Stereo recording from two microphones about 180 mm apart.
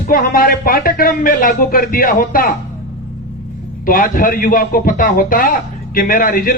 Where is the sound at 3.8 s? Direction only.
50° left (ahead or behind).